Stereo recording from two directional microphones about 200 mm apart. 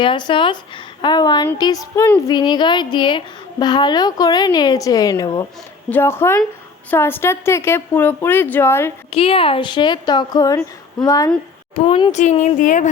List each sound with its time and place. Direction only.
0.0 s a woman's voice: 25° left (ahead or behind)
9.0 s a woman's voice: 30° left (ahead or behind)
12.1 s speech: 35° left (ahead or behind)